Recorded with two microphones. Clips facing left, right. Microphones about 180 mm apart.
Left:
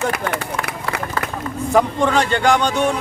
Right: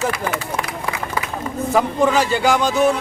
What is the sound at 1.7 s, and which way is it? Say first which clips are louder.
Speech: left 1 dB; 5° right (ahead or behind).